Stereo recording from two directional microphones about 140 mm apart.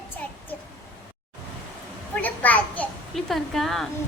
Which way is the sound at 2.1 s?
10° left (ahead or behind).